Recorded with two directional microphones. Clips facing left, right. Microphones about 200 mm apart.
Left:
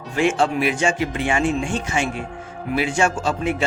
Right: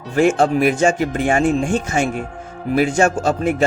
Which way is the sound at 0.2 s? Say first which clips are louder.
Right 5 dB; 40° right (ahead or behind).